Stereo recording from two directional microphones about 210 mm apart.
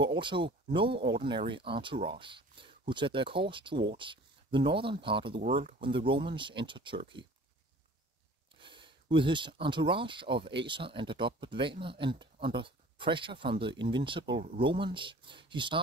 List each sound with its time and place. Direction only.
0.0 s speech: 20° right (ahead or behind)
8.5 s speech: 25° right (ahead or behind)